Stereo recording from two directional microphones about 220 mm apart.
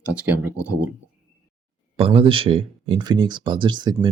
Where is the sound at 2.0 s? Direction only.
25° right (ahead or behind).